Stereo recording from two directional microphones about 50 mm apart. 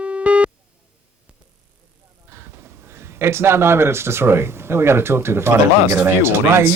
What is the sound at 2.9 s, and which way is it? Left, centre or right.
Speech, right.